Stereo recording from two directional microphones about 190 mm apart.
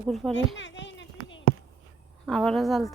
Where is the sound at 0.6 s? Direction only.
75° left (ahead or behind).